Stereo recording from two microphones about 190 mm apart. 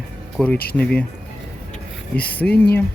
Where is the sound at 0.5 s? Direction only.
55° left (ahead or behind).